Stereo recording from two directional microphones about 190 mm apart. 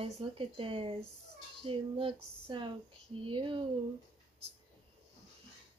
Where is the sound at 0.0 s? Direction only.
30° right (ahead or behind).